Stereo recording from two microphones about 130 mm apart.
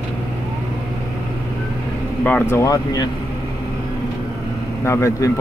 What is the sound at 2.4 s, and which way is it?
Speech, 25° left (ahead or behind).